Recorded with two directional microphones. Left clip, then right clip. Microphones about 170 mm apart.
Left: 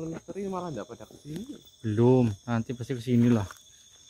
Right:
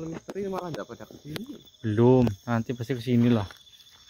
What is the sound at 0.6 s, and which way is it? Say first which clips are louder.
Speech: right 2 dB; 10° right (ahead or behind).